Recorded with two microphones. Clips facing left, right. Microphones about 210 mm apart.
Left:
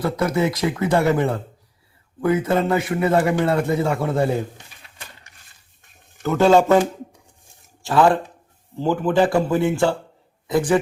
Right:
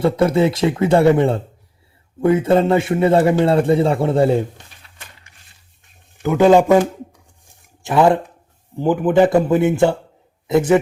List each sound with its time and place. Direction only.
0.0 s speech: 30° right (ahead or behind)
6.2 s a man's voice: 15° right (ahead or behind)